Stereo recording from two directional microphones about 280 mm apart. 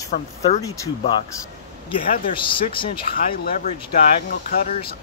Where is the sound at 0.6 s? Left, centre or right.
Centre.